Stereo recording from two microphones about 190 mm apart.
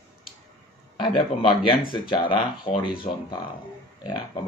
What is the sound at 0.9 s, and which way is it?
Speech, 25° left (ahead or behind).